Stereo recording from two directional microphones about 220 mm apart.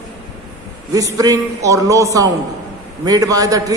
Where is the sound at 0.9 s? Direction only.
15° right (ahead or behind).